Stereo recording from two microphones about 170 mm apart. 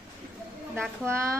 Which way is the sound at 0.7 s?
15° right (ahead or behind).